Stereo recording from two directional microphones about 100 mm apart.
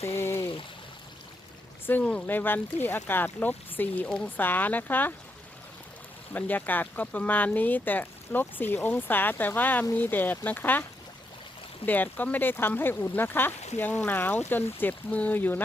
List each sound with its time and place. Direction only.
0.2 s pour: 25° left (ahead or behind)
1.9 s speech: 15° left (ahead or behind)
6.3 s speech: 20° left (ahead or behind)
11.9 s speech: 20° left (ahead or behind)